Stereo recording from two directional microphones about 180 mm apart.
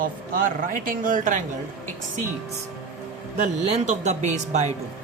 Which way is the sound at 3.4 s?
40° right (ahead or behind).